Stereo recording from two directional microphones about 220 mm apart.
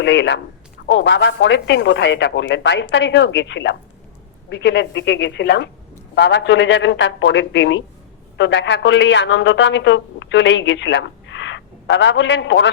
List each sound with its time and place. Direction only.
0.0 s a woman's voice: 55° left (ahead or behind)